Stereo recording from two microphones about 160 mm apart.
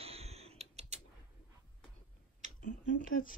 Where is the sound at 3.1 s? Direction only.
60° left (ahead or behind).